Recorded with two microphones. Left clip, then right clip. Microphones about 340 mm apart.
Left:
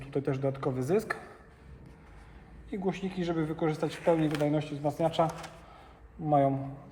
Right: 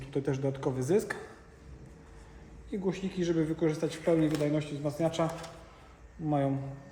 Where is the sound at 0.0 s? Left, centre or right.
Centre.